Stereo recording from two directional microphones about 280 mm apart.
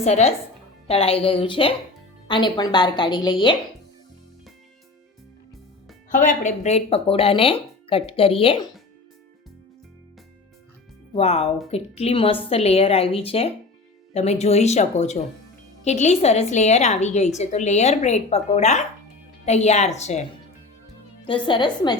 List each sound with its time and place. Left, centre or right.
0.0 s a woman's voice: left
6.1 s a woman's voice: left
11.1 s a woman's voice: left
21.2 s a woman's voice: centre